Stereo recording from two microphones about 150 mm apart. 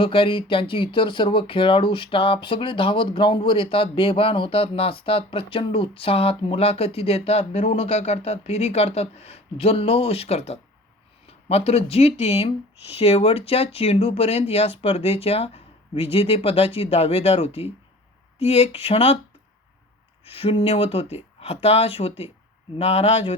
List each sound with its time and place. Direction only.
0.0 s speech: 35° left (ahead or behind)
20.2 s speech: 40° left (ahead or behind)